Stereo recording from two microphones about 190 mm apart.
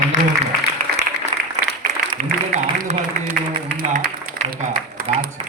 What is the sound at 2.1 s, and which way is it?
A man's voice, 35° right (ahead or behind).